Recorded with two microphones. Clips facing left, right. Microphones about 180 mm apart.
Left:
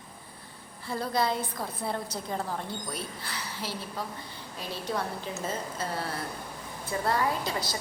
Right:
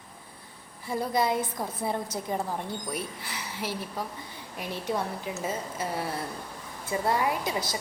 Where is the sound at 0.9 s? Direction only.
20° right (ahead or behind).